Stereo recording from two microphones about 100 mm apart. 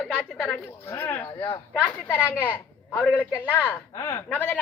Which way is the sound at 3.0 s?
15° left (ahead or behind).